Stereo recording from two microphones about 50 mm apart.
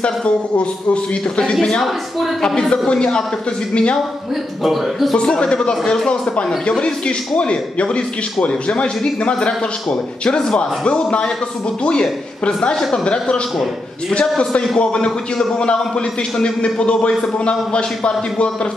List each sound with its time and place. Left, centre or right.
0.0 s a man's voice: left
1.5 s a man's voice: centre
5.1 s a man's voice: centre
10.9 s a man's voice: left; by 12.9 s centre
12.9 s a man's voice: centre
14.4 s a man's voice: left